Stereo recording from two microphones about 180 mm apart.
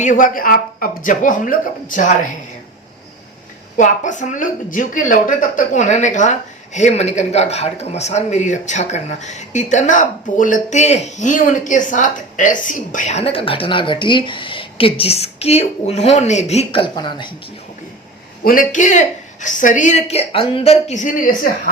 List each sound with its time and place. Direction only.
0.0 s speech: 45° left (ahead or behind)
3.8 s speech: 45° left (ahead or behind); by 17.3 s 25° left (ahead or behind)
18.4 s speech: 50° left (ahead or behind)